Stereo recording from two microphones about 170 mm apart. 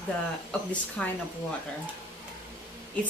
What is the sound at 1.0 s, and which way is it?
Speech, 10° left (ahead or behind).